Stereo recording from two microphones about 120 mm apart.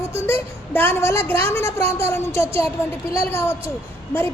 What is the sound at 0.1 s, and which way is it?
A woman's voice, 20° left (ahead or behind).